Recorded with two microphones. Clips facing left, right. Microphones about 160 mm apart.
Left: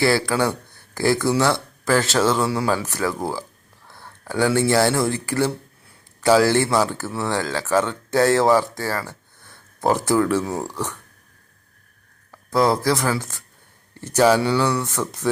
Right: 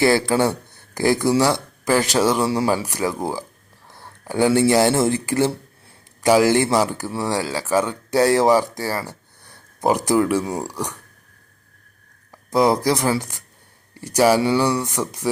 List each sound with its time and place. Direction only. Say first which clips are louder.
0.0 s speech: right 2 dB; 20° right (ahead or behind)
12.3 s speech: right 1 dB; 15° right (ahead or behind)